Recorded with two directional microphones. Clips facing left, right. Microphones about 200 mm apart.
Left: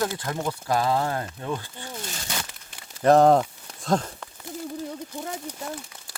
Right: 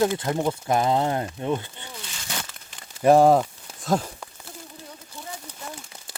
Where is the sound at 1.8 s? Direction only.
40° left (ahead or behind).